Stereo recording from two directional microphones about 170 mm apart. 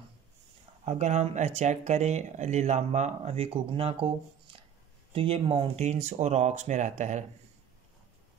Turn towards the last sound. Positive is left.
turn(degrees=-45)  # may be behind; listen again after turning